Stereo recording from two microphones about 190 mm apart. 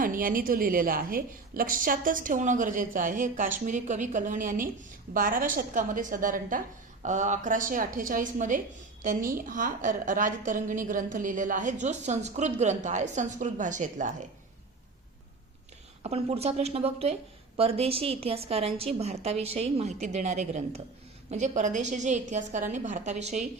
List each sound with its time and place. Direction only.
0.0 s a woman's voice: 45° right (ahead or behind)
16.0 s a woman's voice: 30° right (ahead or behind)